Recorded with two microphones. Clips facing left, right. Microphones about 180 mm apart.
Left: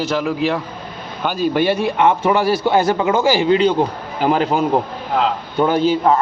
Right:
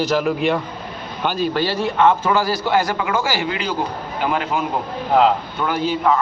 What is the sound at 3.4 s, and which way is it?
A man's voice, 30° left (ahead or behind).